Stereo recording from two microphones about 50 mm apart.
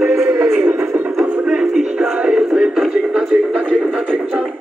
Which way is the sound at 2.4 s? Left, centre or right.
Centre.